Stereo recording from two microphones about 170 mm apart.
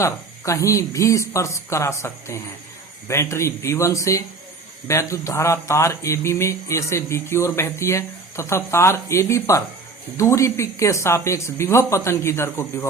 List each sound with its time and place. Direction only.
0.0 s speech: 15° left (ahead or behind)